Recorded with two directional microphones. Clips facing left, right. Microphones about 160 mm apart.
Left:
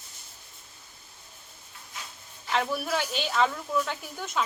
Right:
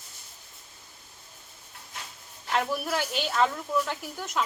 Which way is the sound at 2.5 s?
5° right (ahead or behind).